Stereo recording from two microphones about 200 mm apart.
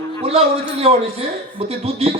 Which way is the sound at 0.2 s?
30° right (ahead or behind).